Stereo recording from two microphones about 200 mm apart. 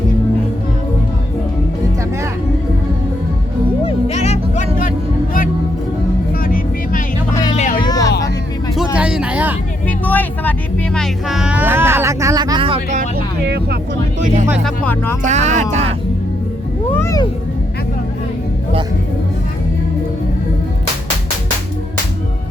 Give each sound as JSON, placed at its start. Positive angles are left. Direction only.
{"t": 3.8, "sound": "music", "side_deg": 30}
{"t": 6.4, "sound": "vehicle", "side_deg": 45}
{"t": 7.5, "sound": "a sound", "side_deg": 35}
{"t": 7.8, "sound": "music", "side_deg": 20}
{"t": 9.0, "sound": "a sound", "side_deg": -5}
{"t": 10.0, "sound": "vehicle", "side_deg": 10}
{"t": 10.9, "sound": "a sound", "side_deg": 0}
{"t": 13.4, "sound": "music", "side_deg": -55}
{"t": 14.6, "sound": "music", "side_deg": 10}
{"t": 15.2, "sound": "speech", "side_deg": -35}
{"t": 16.9, "sound": "speech", "side_deg": 15}